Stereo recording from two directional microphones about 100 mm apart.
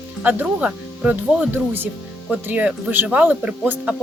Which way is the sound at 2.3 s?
15° right (ahead or behind).